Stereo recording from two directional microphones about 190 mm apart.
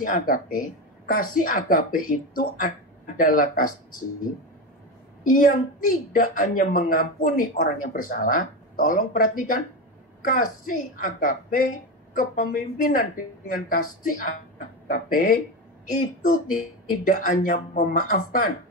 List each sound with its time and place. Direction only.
0.0 s a woman's voice: 45° left (ahead or behind)
5.2 s a woman's voice: 45° left (ahead or behind)